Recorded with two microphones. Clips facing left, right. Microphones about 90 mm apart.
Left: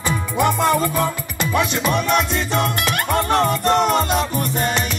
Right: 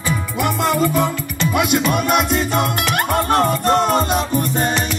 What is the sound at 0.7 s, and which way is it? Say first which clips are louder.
Music: right 1 dB; 15° right (ahead or behind).